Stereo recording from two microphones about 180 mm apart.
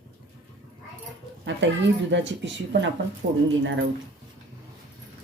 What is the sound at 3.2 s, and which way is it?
Speech, 70° right (ahead or behind).